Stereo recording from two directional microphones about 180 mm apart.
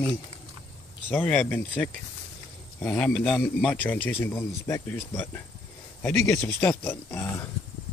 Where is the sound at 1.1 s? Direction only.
10° left (ahead or behind).